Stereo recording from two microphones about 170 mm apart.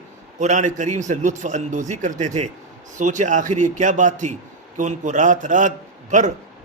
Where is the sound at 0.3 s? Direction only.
45° right (ahead or behind).